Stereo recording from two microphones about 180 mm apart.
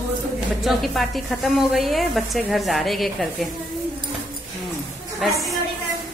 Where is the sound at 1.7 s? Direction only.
Centre (ahead or behind).